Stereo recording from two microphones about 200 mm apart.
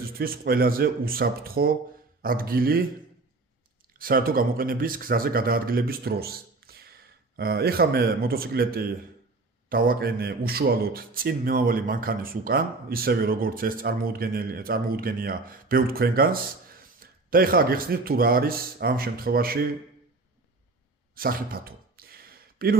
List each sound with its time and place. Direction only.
0.0 s a man's voice: 45° right (ahead or behind)
3.9 s a man's voice: 45° right (ahead or behind)
21.2 s a sound: 45° right (ahead or behind)